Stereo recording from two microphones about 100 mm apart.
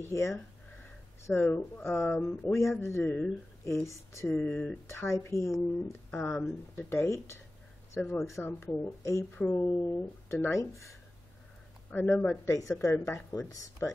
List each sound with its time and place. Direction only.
0.0 s speech: 30° left (ahead or behind)
4.4 s speech: 15° left (ahead or behind)
4.8 s speech: 30° left (ahead or behind)
9.5 s speech: 20° left (ahead or behind)
10.3 s speech: 30° left (ahead or behind)
11.9 s speech: 20° left (ahead or behind)
12.7 s speech: 30° left (ahead or behind)